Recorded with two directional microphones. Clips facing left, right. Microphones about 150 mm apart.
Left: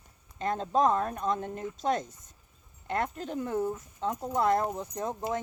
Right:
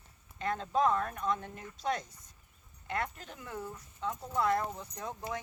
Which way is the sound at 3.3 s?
40° left (ahead or behind).